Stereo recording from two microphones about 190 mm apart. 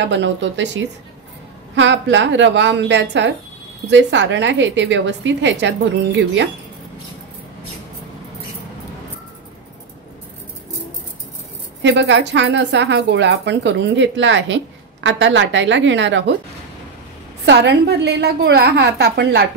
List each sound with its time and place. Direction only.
0.0 s a woman's voice: 70° right (ahead or behind)
11.8 s a woman's voice: 65° right (ahead or behind)
17.5 s a woman's voice: 65° right (ahead or behind)